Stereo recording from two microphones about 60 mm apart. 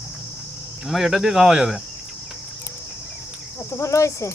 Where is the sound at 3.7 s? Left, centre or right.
Left.